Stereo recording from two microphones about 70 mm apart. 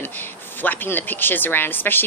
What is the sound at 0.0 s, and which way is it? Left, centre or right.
Speech, left.